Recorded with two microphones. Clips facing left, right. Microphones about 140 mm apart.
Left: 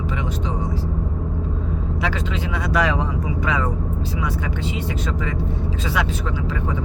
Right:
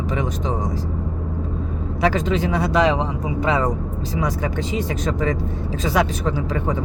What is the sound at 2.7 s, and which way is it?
Speech, 25° right (ahead or behind).